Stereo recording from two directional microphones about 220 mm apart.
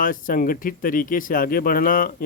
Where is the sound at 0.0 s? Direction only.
40° left (ahead or behind).